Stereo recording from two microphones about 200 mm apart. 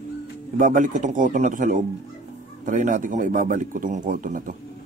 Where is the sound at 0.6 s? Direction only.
40° right (ahead or behind).